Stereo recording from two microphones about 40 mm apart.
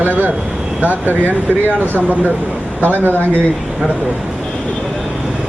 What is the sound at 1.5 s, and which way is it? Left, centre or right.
Speech, right.